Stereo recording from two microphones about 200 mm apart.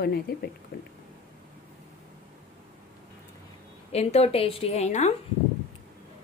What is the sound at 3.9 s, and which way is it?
A woman's voice, 30° left (ahead or behind).